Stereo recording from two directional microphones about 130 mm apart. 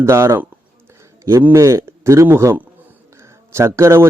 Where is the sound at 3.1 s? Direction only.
20° right (ahead or behind).